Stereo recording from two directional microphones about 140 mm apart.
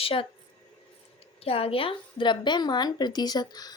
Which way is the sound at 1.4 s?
45° left (ahead or behind).